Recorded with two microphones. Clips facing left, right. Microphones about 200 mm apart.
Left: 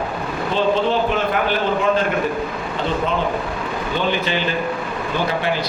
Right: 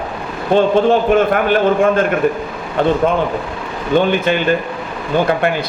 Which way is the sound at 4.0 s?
50° right (ahead or behind).